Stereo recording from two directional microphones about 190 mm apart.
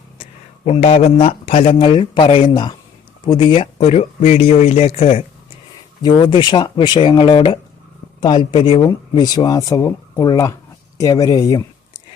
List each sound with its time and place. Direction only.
0.2 s speech: 30° left (ahead or behind)